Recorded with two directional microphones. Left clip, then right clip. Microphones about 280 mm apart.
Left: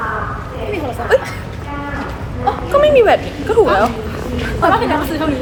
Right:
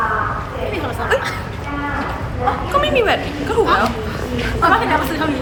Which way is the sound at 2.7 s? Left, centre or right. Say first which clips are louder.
Left 7 dB; centre.